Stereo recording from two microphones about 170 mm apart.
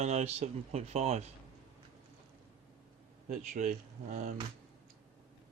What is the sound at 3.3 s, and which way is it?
Speech, 50° right (ahead or behind).